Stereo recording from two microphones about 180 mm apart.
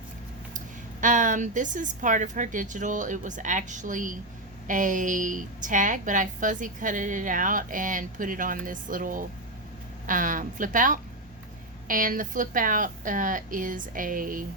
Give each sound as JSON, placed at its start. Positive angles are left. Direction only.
{"t": 1.0, "sound": "a woman's voice", "side_deg": -45}